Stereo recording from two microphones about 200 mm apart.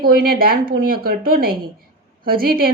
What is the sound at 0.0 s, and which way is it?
Speech, 45° right (ahead or behind).